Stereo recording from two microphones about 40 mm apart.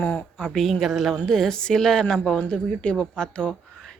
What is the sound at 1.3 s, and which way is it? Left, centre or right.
A woman's voice, centre.